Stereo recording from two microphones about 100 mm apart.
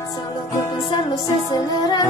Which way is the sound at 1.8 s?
45° left (ahead or behind).